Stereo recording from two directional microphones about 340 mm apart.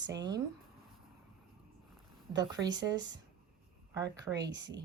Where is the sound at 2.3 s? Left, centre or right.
Centre.